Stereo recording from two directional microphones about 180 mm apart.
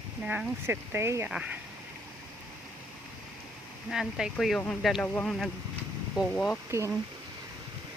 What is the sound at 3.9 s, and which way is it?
Speech, 5° right (ahead or behind).